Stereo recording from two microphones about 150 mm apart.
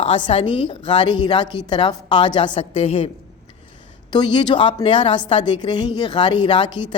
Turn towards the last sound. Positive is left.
turn(degrees=30)  # may be behind; listen again after turning